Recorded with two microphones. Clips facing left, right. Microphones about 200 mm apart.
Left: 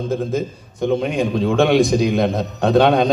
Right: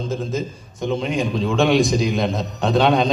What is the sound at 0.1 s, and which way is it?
A man's voice, 60° left (ahead or behind).